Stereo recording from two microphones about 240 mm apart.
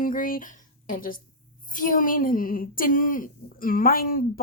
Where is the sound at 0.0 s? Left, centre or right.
Left.